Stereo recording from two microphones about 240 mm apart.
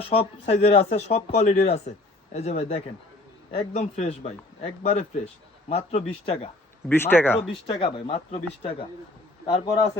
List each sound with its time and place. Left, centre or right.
0.1 s a man's voice: left
6.8 s speech: centre
7.7 s a man's voice: left